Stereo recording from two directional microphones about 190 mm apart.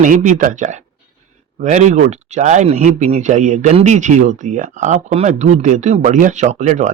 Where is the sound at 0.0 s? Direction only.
40° right (ahead or behind).